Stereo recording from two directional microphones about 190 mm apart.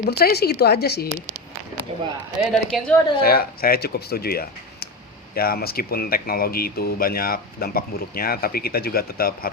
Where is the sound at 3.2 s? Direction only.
50° left (ahead or behind).